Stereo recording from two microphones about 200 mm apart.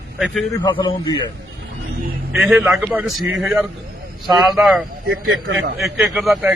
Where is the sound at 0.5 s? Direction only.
20° left (ahead or behind).